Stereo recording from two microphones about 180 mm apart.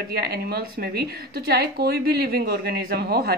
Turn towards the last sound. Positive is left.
turn(degrees=-60)  # may be behind; listen again after turning